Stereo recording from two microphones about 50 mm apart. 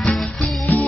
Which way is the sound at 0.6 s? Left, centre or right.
Left.